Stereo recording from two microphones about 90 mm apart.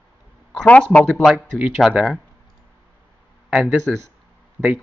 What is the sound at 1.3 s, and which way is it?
Speech, 15° right (ahead or behind).